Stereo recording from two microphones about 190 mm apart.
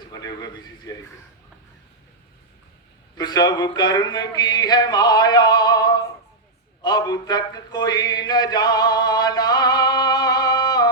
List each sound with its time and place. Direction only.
0.1 s speech: 20° left (ahead or behind)
3.2 s speech: 20° left (ahead or behind)
6.8 s a sound: 20° left (ahead or behind)